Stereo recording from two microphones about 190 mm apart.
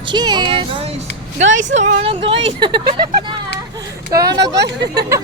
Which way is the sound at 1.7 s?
40° right (ahead or behind).